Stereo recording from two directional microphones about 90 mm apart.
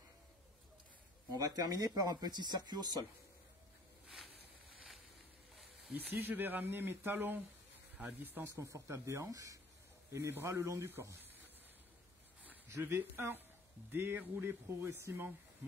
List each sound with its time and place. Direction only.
1.4 s speech: 45° right (ahead or behind)
5.9 s speech: 20° right (ahead or behind)
8.5 s speech: 35° right (ahead or behind)
12.6 s speech: 30° right (ahead or behind)